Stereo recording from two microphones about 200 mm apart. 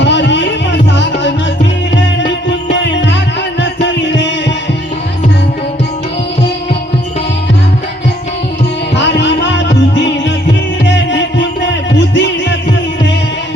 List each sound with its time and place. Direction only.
0.0 s music: 60° left (ahead or behind)
2.7 s music: 60° left (ahead or behind)
9.0 s music: 60° left (ahead or behind)